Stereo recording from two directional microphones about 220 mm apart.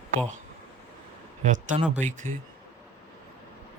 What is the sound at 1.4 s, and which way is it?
Speech, 35° right (ahead or behind).